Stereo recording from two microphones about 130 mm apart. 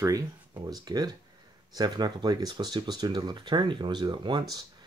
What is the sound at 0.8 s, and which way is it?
Speech, 30° right (ahead or behind).